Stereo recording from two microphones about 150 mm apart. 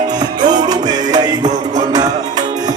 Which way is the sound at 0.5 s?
25° right (ahead or behind).